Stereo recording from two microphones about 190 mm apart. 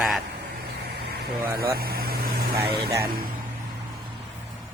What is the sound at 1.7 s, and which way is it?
Vehicle, 55° right (ahead or behind).